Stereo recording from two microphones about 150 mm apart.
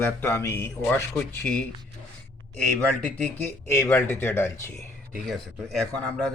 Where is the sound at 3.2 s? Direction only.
15° left (ahead or behind).